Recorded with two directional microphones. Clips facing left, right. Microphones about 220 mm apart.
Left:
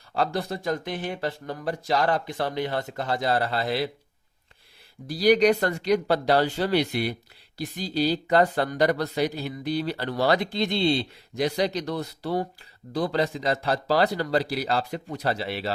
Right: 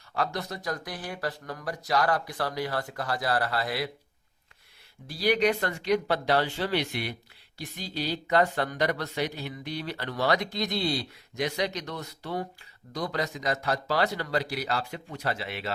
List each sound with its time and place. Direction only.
0.1 s speech: 30° left (ahead or behind)
5.0 s speech: 40° left (ahead or behind)